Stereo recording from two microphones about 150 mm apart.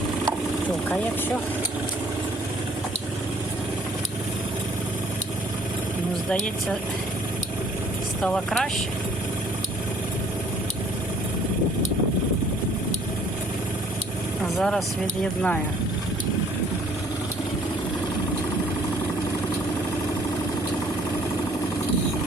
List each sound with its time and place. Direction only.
8.2 s speech: centre (ahead or behind)
14.6 s speech: 5° left (ahead or behind)